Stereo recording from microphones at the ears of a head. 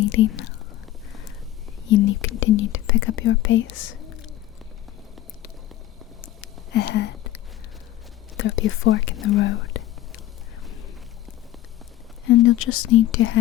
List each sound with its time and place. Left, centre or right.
0.0 s speech: left
1.9 s speech: left
6.2 s a sound: left
8.4 s speech: left
12.2 s speech: left